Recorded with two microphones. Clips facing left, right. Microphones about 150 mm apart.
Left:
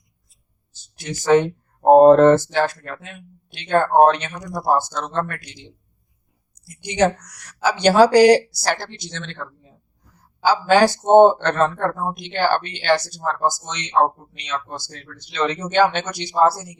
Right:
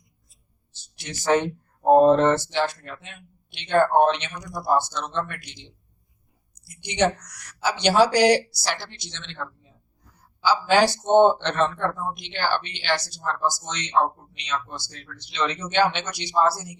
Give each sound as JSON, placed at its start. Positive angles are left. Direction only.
{"t": 1.8, "sound": "speech", "side_deg": 50}
{"t": 6.7, "sound": "speech", "side_deg": 45}